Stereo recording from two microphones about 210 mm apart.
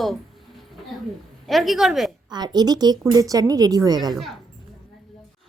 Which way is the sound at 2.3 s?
20° right (ahead or behind).